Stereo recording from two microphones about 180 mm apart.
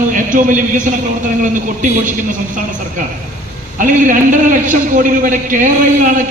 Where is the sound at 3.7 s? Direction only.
45° right (ahead or behind).